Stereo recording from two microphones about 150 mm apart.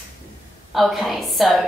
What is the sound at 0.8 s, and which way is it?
Speech, centre (ahead or behind).